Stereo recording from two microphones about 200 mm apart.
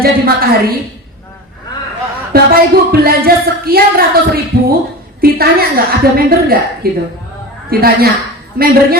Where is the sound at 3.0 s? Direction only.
50° right (ahead or behind).